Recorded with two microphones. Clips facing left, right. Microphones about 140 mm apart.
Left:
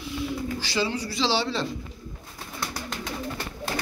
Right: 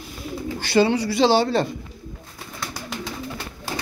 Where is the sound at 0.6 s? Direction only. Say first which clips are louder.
Right 13 dB; 60° right (ahead or behind).